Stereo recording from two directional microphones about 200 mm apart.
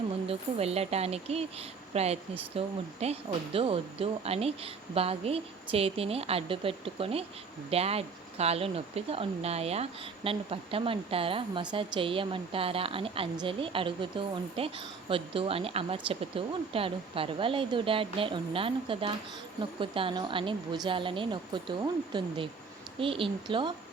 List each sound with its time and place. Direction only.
0.3 s speech: 30° right (ahead or behind)